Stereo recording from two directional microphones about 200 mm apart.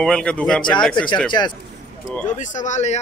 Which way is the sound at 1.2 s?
20° left (ahead or behind).